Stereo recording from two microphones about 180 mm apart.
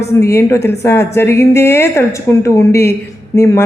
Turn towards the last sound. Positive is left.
turn(degrees=15)  # may be behind; listen again after turning